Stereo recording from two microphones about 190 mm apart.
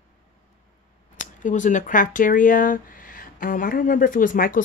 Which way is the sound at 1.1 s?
40° left (ahead or behind).